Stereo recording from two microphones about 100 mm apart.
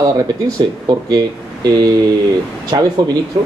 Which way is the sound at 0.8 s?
40° right (ahead or behind).